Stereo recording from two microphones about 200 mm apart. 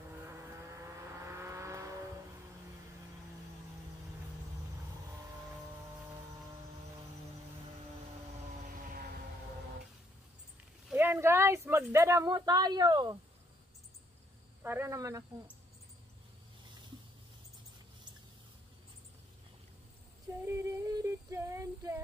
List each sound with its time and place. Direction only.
0.3 s vehicle: 15° right (ahead or behind)
8.6 s vehicle: 45° right (ahead or behind)
10.9 s speech: 10° right (ahead or behind)
14.6 s speech: 10° right (ahead or behind)
20.4 s female singing: 15° right (ahead or behind)